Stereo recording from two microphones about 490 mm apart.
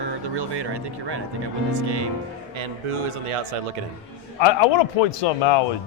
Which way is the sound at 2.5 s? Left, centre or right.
Right.